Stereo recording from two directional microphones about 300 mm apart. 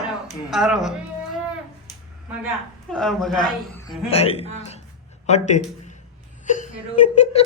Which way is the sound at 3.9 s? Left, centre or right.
Centre.